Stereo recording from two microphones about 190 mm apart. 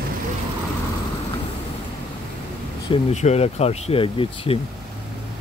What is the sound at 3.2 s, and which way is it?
Speech, 35° left (ahead or behind).